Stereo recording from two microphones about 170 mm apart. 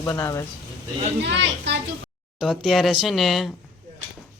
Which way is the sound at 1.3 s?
90° right.